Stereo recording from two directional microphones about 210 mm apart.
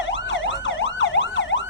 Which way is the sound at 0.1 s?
60° left (ahead or behind).